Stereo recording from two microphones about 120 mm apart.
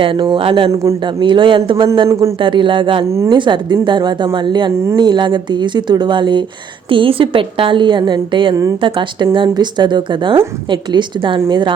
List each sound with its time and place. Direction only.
0.0 s a woman's voice: 45° right (ahead or behind)
0.7 s a man's voice: 25° right (ahead or behind)
1.0 s a woman's voice: 40° right (ahead or behind)
2.0 s a man's voice: 25° right (ahead or behind)
2.4 s a woman's voice: 45° right (ahead or behind)